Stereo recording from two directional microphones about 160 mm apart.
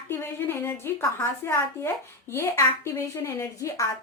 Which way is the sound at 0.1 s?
15° left (ahead or behind).